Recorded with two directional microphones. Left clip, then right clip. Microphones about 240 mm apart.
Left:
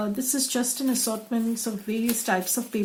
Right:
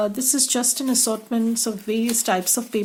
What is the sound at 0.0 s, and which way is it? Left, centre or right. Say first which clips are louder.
Speech: right 6 dB; right.